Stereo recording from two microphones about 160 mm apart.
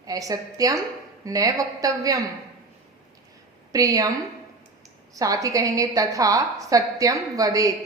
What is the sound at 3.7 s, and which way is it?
Speech, 20° right (ahead or behind).